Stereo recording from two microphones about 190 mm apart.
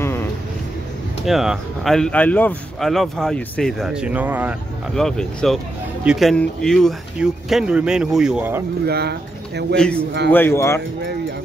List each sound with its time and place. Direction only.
1.2 s speech: centre (ahead or behind)
4.9 s speech: 5° left (ahead or behind)
8.8 s speech: 55° right (ahead or behind)
10.3 s speech: 10° left (ahead or behind)